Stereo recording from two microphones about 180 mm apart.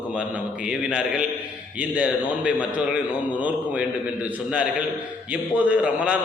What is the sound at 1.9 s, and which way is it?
Speech, 5° right (ahead or behind).